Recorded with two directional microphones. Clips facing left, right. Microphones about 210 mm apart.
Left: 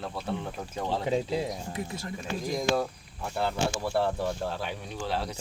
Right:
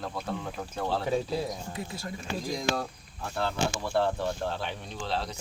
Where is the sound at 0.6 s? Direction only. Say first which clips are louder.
Even; 15° left (ahead or behind).